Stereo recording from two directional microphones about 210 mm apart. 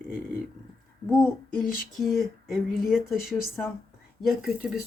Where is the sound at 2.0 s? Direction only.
Centre (ahead or behind).